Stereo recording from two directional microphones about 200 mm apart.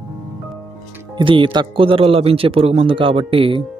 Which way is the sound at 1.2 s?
25° right (ahead or behind).